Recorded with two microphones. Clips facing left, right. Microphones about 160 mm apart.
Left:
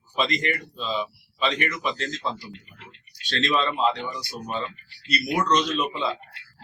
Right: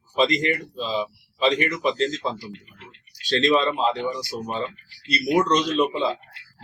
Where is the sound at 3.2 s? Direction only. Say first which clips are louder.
Right 5 dB; 35° right (ahead or behind).